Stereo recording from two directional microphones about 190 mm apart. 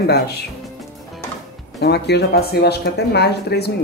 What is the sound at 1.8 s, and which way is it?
Speech, 60° left (ahead or behind).